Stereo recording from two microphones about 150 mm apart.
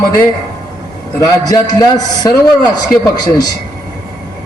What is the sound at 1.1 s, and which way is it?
A man's voice, 20° left (ahead or behind).